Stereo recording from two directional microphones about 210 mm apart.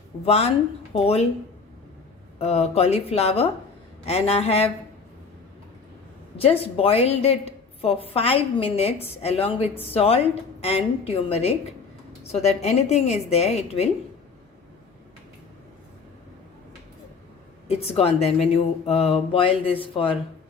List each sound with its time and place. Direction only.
0.3 s a woman's voice: 30° left (ahead or behind)
2.4 s a woman's voice: 30° left (ahead or behind)
6.3 s a woman's voice: 25° left (ahead or behind)
17.7 s a woman's voice: 30° left (ahead or behind)